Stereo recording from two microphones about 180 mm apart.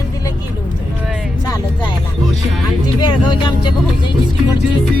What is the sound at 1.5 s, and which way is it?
Music, 20° left (ahead or behind).